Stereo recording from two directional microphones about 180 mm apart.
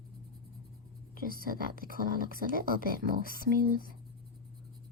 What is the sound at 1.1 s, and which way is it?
Speech, 55° right (ahead or behind).